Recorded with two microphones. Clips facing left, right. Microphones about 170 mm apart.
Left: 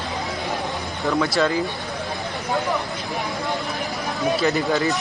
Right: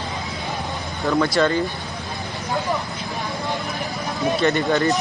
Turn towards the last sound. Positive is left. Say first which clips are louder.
# right 2 dB
turn(degrees=0)  # may be behind; listen again after turning